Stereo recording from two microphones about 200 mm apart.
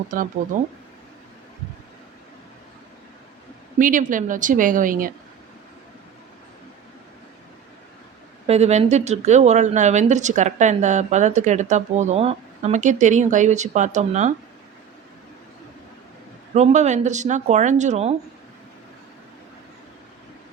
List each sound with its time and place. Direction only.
3.8 s speech: 40° right (ahead or behind)
8.4 s speech: 30° right (ahead or behind)
16.6 s speech: 35° right (ahead or behind)